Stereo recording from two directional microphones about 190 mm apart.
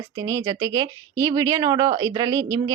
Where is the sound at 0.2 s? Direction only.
20° right (ahead or behind).